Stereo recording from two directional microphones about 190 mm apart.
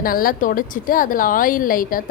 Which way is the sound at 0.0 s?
50° left (ahead or behind).